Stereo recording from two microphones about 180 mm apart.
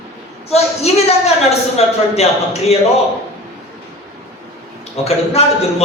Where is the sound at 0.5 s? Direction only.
35° left (ahead or behind).